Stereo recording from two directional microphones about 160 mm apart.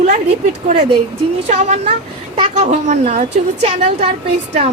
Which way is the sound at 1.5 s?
45° right (ahead or behind).